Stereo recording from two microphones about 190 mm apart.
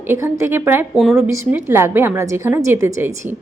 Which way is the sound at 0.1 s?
15° right (ahead or behind).